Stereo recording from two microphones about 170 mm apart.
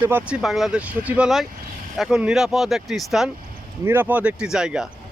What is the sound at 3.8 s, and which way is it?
Speech, 10° right (ahead or behind).